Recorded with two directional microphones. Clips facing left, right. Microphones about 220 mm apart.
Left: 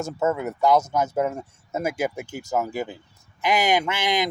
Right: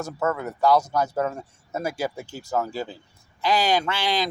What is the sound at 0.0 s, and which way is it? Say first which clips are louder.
Speech: left 2 dB; 25° left (ahead or behind).